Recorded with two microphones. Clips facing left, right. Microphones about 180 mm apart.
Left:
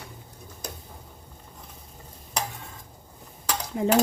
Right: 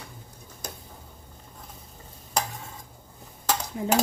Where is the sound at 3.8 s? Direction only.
70° left (ahead or behind).